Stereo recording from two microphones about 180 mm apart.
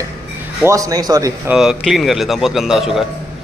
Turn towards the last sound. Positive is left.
turn(degrees=0)  # may be behind; listen again after turning